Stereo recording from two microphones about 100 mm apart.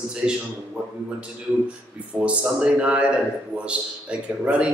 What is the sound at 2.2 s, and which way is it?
Speech, 10° right (ahead or behind).